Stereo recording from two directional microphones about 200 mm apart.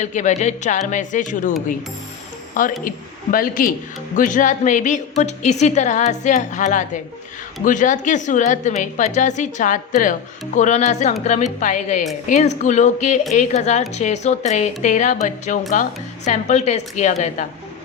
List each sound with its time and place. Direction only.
0.0 s a woman's voice: 35° left (ahead or behind)
2.6 s a woman's voice: 40° left (ahead or behind)